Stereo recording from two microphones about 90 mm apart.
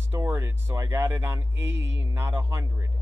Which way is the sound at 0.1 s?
25° right (ahead or behind).